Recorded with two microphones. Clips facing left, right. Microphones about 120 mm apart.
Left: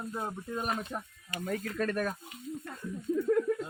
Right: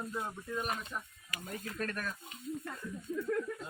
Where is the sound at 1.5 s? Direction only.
75° left (ahead or behind).